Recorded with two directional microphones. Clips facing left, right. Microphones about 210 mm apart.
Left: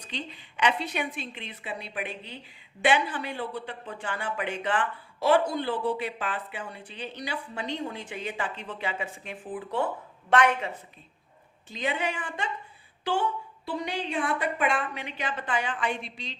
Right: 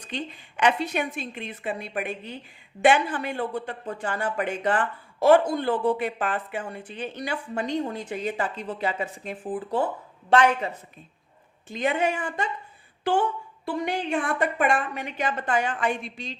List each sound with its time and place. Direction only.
0.0 s a woman's voice: 50° right (ahead or behind); by 10.7 s 30° right (ahead or behind)
11.7 s speech: 50° right (ahead or behind)